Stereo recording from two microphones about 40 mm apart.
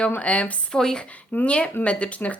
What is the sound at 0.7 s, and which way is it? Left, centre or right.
Speech, centre.